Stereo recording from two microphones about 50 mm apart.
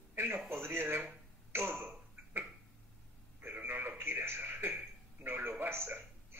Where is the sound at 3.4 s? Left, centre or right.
Right.